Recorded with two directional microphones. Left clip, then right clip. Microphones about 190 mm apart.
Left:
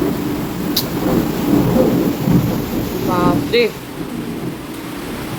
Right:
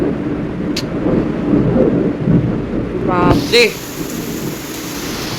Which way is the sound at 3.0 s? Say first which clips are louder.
Right 3 dB; centre (ahead or behind).